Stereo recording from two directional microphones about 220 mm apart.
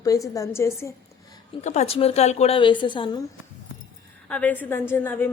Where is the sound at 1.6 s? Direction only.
30° left (ahead or behind).